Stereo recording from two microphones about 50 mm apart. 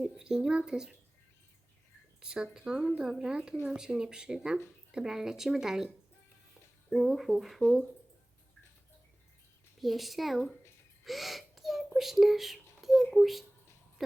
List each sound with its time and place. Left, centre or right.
0.2 s speech: centre
2.2 s speech: centre
6.9 s speech: centre
9.8 s speech: centre
11.0 s a sound: centre
11.9 s speech: centre